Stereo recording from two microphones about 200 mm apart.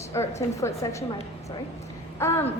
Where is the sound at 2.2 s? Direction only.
10° left (ahead or behind).